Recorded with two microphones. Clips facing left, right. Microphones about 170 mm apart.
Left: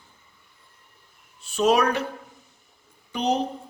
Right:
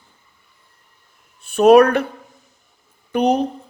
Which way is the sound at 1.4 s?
55° right (ahead or behind).